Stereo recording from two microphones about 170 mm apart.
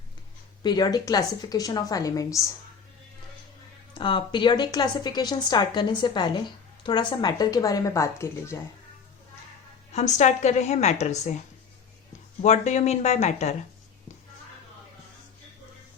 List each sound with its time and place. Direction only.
0.6 s a woman's voice: 25° left (ahead or behind)
3.9 s a woman's voice: 30° left (ahead or behind)
9.9 s a woman's voice: 45° left (ahead or behind)
12.4 s a woman's voice: 45° left (ahead or behind)